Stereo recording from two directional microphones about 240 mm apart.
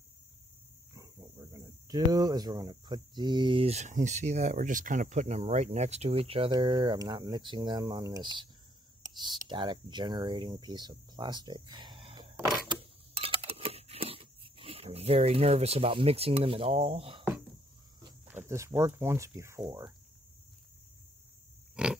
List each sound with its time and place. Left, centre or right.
0.9 s speech: centre
12.6 s a sound: right
18.3 s speech: centre
21.8 s pig: centre